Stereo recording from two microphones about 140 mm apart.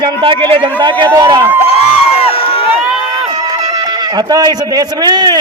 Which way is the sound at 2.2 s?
45° left (ahead or behind).